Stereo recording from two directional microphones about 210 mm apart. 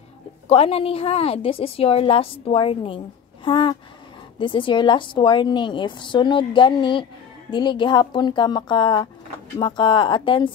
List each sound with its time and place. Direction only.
0.5 s a woman's voice: 30° left (ahead or behind)